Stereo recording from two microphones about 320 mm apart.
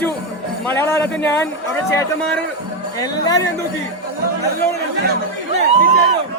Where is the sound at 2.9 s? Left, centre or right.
Centre.